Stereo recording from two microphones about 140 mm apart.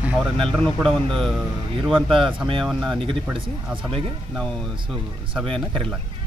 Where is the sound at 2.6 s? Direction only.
Centre (ahead or behind).